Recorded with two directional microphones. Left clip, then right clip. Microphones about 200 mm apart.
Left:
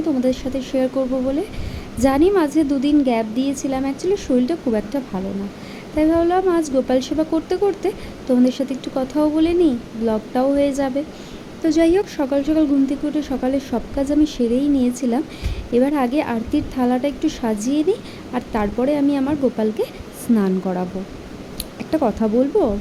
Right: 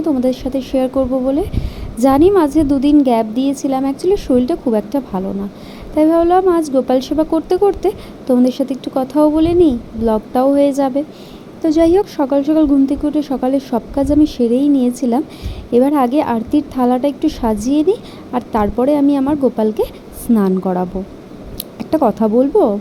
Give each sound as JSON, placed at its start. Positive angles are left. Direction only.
{"t": 0.0, "sound": "speech", "side_deg": -15}